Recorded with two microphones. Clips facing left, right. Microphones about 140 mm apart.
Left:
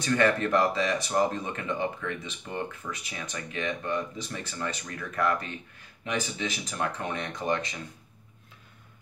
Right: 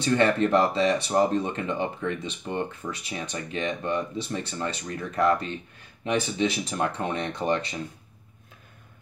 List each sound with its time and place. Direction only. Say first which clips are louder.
0.0 s speech: right 3 dB; 25° right (ahead or behind)